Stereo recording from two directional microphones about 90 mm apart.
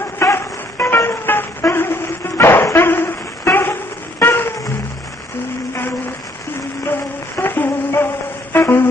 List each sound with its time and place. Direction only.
0.2 s music: 30° left (ahead or behind)
7.3 s humming: 25° left (ahead or behind)
8.5 s a sound: 25° left (ahead or behind)